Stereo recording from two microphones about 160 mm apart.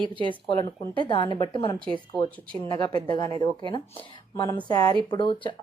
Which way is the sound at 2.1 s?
Centre (ahead or behind).